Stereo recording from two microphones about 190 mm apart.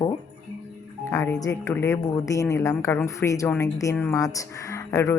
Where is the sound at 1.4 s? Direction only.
15° left (ahead or behind).